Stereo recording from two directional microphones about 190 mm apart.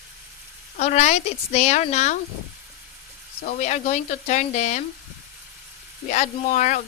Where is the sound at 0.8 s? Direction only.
35° left (ahead or behind).